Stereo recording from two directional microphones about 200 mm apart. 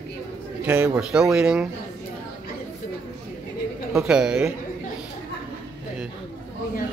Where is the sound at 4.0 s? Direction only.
5° right (ahead or behind).